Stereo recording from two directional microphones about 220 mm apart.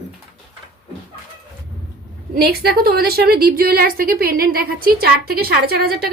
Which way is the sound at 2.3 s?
45° right (ahead or behind).